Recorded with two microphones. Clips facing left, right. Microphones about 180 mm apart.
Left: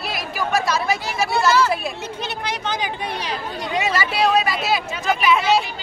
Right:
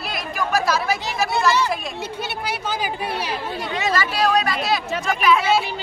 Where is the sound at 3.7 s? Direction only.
10° left (ahead or behind).